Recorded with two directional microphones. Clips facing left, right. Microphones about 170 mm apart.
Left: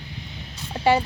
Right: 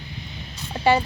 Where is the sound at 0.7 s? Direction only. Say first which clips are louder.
Even; 10° left (ahead or behind).